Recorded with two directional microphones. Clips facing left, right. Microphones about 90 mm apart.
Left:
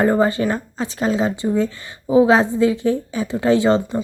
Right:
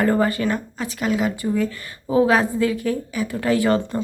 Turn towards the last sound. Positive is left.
turn(degrees=25)  # may be behind; listen again after turning